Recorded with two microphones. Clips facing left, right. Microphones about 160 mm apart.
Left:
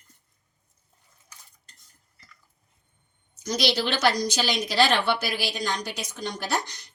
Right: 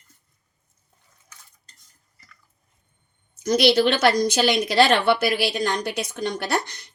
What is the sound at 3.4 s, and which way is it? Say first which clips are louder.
A woman's voice: right 8 dB; 55° right (ahead or behind).